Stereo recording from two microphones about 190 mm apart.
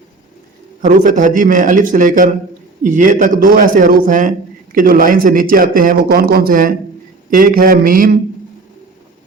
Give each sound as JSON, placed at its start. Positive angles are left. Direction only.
{"t": 0.8, "sound": "a man's voice", "side_deg": -45}